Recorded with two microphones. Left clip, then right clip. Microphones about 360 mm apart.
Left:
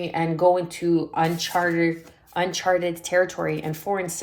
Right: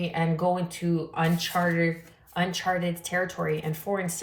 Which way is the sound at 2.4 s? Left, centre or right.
Left.